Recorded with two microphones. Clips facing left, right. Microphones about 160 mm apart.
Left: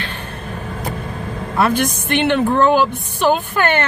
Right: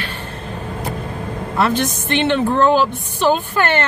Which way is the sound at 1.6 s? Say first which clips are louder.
Left 1 dB; 15° left (ahead or behind).